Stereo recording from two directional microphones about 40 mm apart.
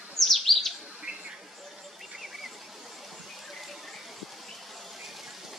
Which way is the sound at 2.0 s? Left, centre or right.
Centre.